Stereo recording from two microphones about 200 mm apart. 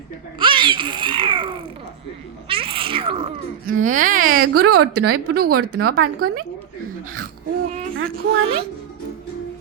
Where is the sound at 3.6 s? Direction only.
40° right (ahead or behind).